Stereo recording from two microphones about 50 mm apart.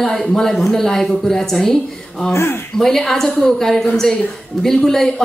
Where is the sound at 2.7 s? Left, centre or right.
Centre.